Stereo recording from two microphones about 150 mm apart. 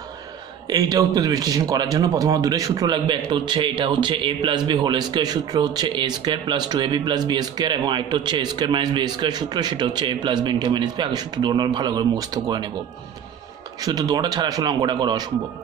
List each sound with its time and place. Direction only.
0.7 s speech: 25° right (ahead or behind)
13.7 s speech: 25° right (ahead or behind)